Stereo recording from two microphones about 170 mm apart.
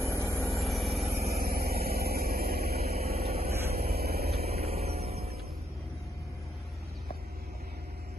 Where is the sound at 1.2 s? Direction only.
65° right (ahead or behind).